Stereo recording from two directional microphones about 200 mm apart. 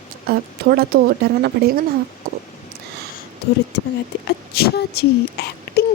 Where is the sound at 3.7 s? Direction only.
60° left (ahead or behind).